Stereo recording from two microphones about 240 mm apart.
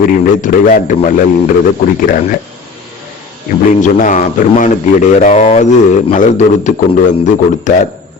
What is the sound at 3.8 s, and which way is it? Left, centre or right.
A man's voice, left.